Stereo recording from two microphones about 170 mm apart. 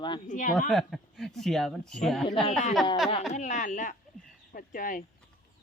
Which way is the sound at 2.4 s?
40° left (ahead or behind).